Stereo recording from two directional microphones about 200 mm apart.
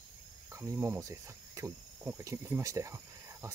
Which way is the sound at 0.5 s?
15° right (ahead or behind).